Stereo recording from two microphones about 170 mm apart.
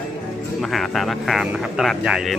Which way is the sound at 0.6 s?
Centre (ahead or behind).